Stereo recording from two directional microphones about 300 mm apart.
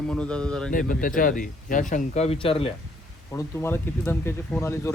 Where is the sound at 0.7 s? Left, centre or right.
Left; by 4.9 s centre.